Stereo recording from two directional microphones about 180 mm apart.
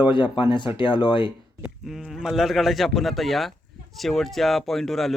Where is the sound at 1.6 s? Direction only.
Centre (ahead or behind).